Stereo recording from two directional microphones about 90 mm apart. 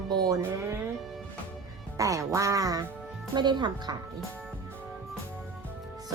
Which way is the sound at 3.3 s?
55° right (ahead or behind).